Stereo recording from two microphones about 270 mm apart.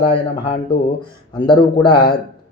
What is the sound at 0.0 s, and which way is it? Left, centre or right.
A man's voice, centre.